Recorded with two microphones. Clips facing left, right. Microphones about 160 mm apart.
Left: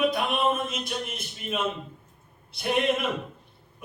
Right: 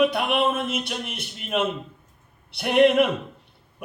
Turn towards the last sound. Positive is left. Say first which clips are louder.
# right 8 dB
turn(degrees=-65)  # may be behind; listen again after turning